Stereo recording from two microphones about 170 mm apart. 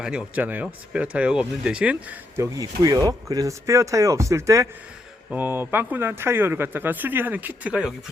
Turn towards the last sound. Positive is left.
turn(degrees=-5)  # may be behind; listen again after turning